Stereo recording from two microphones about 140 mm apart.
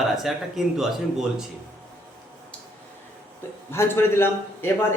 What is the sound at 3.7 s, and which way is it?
A man's voice, 20° left (ahead or behind).